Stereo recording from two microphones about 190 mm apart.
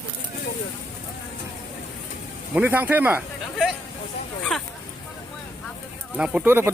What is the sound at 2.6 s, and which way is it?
Speech, 10° right (ahead or behind).